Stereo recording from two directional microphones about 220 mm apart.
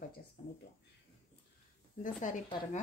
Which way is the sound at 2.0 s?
35° left (ahead or behind).